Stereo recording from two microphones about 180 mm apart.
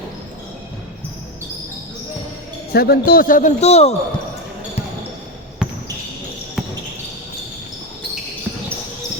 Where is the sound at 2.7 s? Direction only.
60° left (ahead or behind); by 4.0 s 35° left (ahead or behind).